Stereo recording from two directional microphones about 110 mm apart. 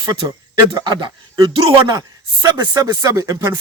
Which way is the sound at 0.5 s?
45° right (ahead or behind).